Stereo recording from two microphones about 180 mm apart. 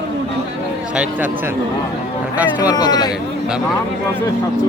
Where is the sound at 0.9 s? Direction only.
10° right (ahead or behind).